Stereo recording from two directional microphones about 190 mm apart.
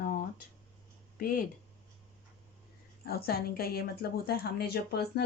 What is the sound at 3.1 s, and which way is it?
A woman's voice, 55° left (ahead or behind).